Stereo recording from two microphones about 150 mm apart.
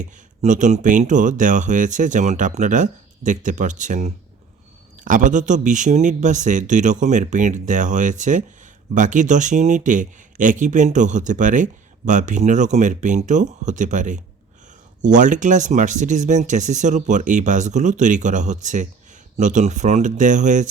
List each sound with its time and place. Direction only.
0.0 s speech: 55° right (ahead or behind)